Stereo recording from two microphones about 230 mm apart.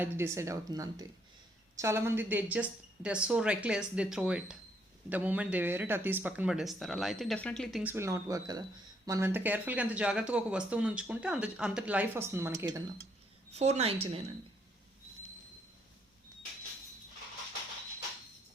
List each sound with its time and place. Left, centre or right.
0.0 s speech: centre
13.5 s a woman's voice: right